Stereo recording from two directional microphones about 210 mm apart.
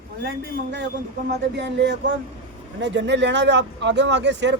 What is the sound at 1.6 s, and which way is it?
Speech, 55° right (ahead or behind).